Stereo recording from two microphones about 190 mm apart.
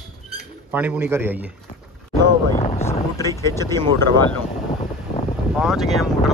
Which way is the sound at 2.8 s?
15° left (ahead or behind).